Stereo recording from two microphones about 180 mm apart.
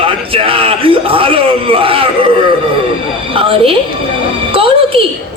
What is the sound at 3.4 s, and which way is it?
Speech, 30° right (ahead or behind).